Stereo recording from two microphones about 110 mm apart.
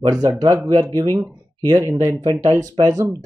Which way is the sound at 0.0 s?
35° right (ahead or behind).